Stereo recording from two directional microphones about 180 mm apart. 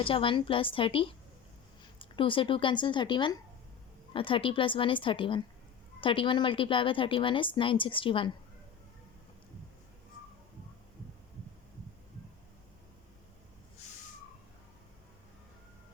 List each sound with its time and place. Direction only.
0.0 s a woman's voice: 30° left (ahead or behind)